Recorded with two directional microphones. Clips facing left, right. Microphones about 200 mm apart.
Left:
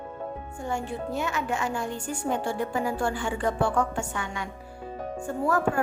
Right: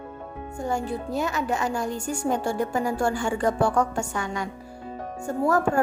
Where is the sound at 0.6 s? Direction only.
40° right (ahead or behind).